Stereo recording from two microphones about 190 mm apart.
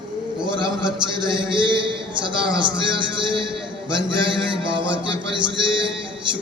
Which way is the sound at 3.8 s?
25° right (ahead or behind).